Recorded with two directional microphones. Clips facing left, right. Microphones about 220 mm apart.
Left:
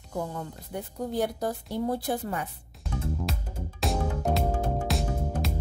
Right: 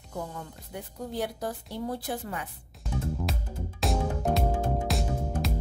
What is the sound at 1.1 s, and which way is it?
A woman's voice, 45° left (ahead or behind).